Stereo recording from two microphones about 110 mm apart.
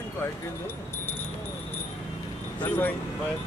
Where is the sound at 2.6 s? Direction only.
15° left (ahead or behind).